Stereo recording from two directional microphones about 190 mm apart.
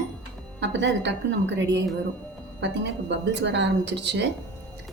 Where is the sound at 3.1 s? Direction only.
70° right (ahead or behind).